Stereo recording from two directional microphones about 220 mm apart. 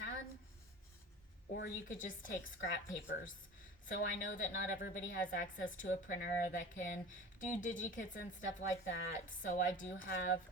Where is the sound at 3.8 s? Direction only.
35° left (ahead or behind).